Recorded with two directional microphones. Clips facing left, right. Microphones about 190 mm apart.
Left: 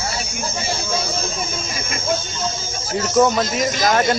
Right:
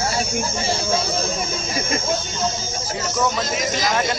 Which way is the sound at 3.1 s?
40° left (ahead or behind).